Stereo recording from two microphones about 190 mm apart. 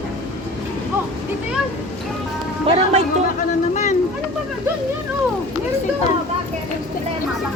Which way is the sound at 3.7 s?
40° left (ahead or behind).